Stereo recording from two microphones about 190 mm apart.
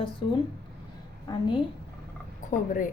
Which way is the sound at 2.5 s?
45° left (ahead or behind).